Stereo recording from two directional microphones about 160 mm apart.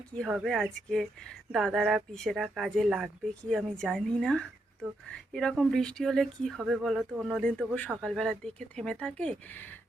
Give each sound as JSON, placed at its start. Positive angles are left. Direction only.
{"t": 0.1, "sound": "speech", "side_deg": 0}